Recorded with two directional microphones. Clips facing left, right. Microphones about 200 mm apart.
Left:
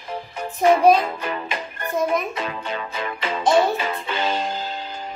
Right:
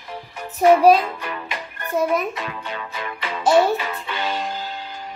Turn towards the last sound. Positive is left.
turn(degrees=25)  # may be behind; listen again after turning